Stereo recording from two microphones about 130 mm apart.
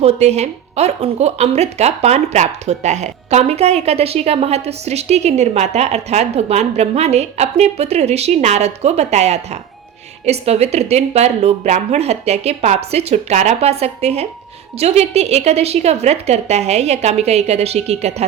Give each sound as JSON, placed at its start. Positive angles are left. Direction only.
{"t": 0.0, "sound": "speech", "side_deg": -55}